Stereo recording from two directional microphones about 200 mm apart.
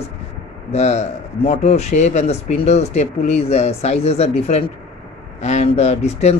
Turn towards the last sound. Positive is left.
turn(degrees=35)  # may be behind; listen again after turning